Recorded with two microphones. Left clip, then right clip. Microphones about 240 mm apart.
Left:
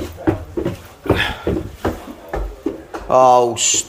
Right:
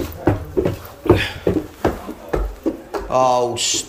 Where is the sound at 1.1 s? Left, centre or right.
Centre.